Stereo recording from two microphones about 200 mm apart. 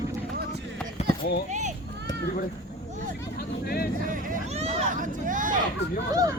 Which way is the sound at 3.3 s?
50° left (ahead or behind).